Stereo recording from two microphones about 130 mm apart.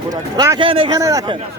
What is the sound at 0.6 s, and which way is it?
Speech, 45° right (ahead or behind).